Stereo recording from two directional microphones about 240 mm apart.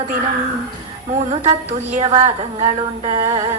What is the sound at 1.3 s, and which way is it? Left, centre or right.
A woman's voice, right.